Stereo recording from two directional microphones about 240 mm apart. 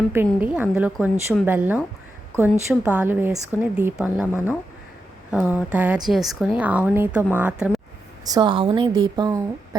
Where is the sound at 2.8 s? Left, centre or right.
Centre.